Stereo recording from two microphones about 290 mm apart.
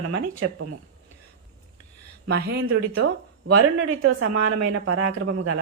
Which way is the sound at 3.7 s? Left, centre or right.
Right.